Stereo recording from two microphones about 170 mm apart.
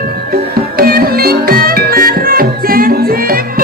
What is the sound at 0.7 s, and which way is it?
Music, 60° right (ahead or behind).